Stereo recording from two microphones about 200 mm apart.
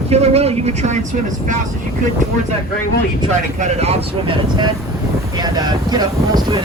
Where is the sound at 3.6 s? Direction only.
30° right (ahead or behind).